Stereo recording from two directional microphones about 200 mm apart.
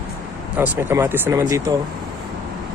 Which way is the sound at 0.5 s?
10° right (ahead or behind).